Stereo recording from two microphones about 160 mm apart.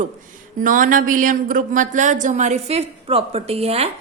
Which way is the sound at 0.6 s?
55° right (ahead or behind).